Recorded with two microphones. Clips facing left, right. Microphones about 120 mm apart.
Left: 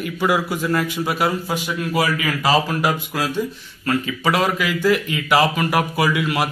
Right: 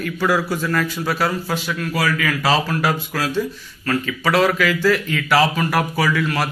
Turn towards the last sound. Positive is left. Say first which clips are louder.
# even
turn(degrees=15)  # may be behind; listen again after turning